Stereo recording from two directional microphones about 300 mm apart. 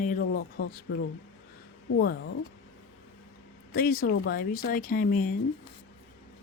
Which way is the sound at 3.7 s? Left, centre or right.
Left.